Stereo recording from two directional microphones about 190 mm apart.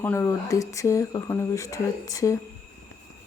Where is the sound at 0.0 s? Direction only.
15° left (ahead or behind).